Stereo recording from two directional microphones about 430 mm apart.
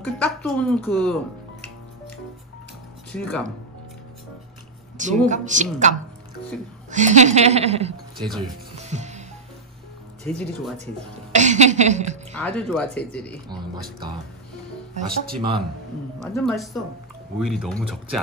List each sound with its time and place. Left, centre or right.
0.0 s speech: centre
3.1 s speech: centre
4.9 s a woman's voice: centre
8.2 s speech: centre
8.7 s music: centre
10.2 s speech: centre
11.3 s a woman's voice: centre
12.4 s speech: centre
16.3 s speech: centre